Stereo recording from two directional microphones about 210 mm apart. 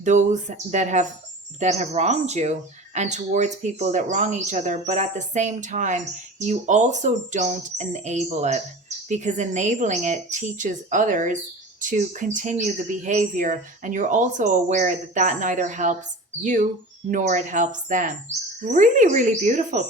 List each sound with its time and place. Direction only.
0.0 s speech: 35° right (ahead or behind)